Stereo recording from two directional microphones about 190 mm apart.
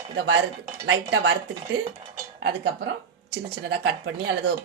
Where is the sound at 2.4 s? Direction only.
60° right (ahead or behind).